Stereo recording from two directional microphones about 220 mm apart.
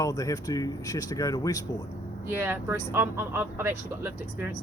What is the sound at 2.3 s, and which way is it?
Speech, 10° right (ahead or behind).